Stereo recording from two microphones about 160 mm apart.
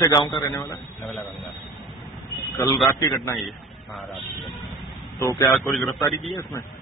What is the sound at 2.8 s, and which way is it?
Speech, 20° left (ahead or behind).